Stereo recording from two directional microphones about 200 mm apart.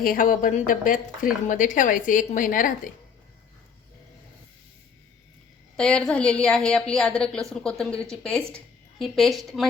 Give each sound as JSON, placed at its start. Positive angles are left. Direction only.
{"t": 0.0, "sound": "speech", "side_deg": 45}
{"t": 5.7, "sound": "a woman's voice", "side_deg": 5}